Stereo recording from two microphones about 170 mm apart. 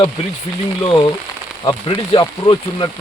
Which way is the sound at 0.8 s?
30° left (ahead or behind).